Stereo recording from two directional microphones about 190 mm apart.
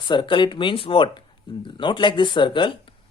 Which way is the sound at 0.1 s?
25° left (ahead or behind).